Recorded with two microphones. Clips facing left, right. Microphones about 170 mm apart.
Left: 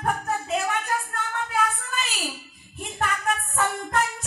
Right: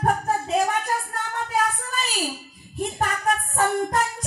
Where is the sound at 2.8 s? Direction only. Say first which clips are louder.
Right 3 dB; 40° right (ahead or behind).